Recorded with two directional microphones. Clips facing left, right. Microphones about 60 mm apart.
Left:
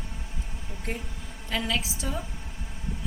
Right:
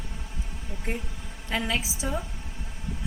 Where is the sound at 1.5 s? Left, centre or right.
Centre.